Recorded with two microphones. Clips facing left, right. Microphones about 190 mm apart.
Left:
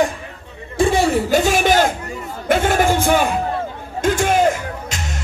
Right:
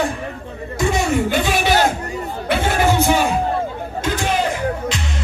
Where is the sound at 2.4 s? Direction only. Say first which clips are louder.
Left 3 dB; 45° left (ahead or behind).